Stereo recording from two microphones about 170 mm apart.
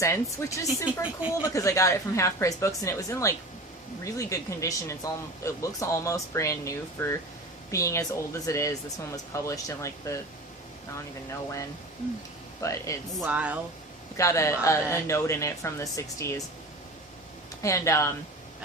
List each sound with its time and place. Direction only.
0.0 s speech: 15° left (ahead or behind)
0.9 s speech: 10° right (ahead or behind)
1.5 s speech: 20° left (ahead or behind)
12.6 s speech: 20° left (ahead or behind)
13.2 s speech: 10° right (ahead or behind)
14.2 s speech: 15° left (ahead or behind)
17.6 s speech: 15° left (ahead or behind)